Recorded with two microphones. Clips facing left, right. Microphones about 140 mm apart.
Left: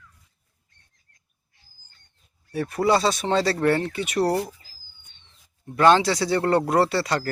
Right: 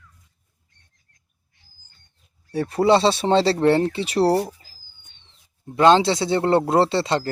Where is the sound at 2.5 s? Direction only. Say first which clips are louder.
Right 4 dB; 30° right (ahead or behind).